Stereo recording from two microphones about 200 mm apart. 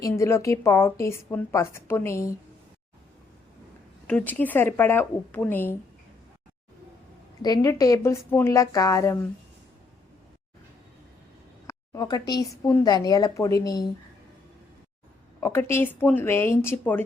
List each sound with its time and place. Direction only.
0.0 s a woman's voice: 15° left (ahead or behind)
4.0 s a woman's voice: 5° left (ahead or behind)
7.4 s a woman's voice: 15° left (ahead or behind)
11.6 s speech: 15° left (ahead or behind)
15.4 s a woman's voice: 10° left (ahead or behind)